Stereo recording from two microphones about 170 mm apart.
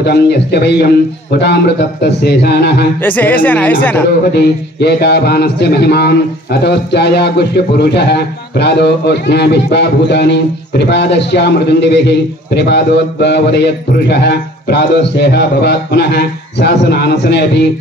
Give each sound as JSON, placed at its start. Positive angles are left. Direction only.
{"t": 0.0, "sound": "a man's voice", "side_deg": 75}
{"t": 3.0, "sound": "speech", "side_deg": 10}
{"t": 4.7, "sound": "a man's voice", "side_deg": 75}